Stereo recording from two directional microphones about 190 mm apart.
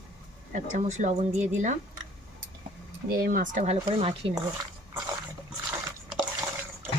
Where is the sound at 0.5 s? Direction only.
40° right (ahead or behind).